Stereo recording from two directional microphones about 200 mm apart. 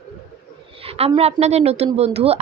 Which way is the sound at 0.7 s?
30° right (ahead or behind).